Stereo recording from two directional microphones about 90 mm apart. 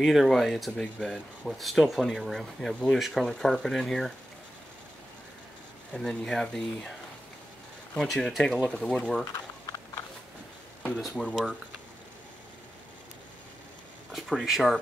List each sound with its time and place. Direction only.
0.0 s speech: centre (ahead or behind)
5.9 s speech: 5° left (ahead or behind)
8.0 s speech: centre (ahead or behind)
9.2 s a sound: 40° left (ahead or behind)
11.2 s speech: centre (ahead or behind)
14.1 s speech: centre (ahead or behind)